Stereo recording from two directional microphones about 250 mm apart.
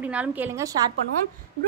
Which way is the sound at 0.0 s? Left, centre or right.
Centre.